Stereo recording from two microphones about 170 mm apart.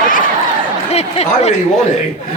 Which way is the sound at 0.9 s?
40° left (ahead or behind).